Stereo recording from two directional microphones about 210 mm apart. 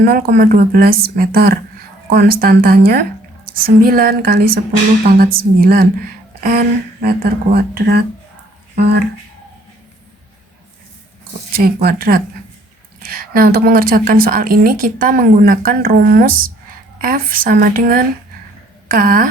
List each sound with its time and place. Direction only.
0.0 s a woman's voice: 45° right (ahead or behind)
11.5 s a woman's voice: 45° right (ahead or behind)